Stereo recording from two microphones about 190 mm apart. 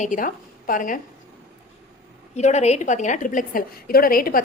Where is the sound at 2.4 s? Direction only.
35° left (ahead or behind).